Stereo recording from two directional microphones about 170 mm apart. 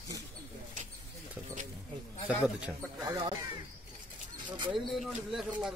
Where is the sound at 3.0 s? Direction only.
25° right (ahead or behind).